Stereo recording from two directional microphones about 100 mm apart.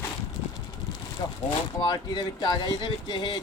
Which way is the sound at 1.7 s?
45° left (ahead or behind).